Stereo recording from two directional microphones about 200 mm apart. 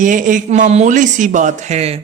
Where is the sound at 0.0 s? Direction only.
40° right (ahead or behind).